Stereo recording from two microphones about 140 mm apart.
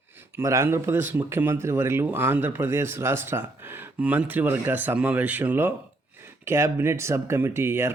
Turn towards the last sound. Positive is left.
turn(degrees=-15)  # may be behind; listen again after turning